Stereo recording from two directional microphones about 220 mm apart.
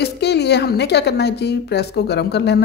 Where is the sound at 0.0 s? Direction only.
50° left (ahead or behind).